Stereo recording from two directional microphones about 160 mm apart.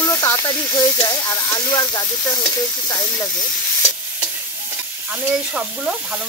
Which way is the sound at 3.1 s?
5° left (ahead or behind).